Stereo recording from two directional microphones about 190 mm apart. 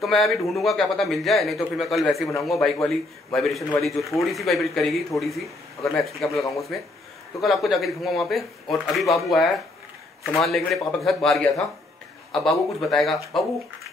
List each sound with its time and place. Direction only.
0.0 s speech: centre (ahead or behind)
6.3 s speech: 15° left (ahead or behind)
7.4 s speech: centre (ahead or behind)